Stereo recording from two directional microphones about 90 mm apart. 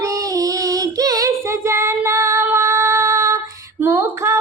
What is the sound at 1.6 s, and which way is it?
Female singing, 30° right (ahead or behind).